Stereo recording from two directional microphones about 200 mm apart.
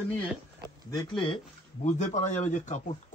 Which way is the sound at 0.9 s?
25° left (ahead or behind).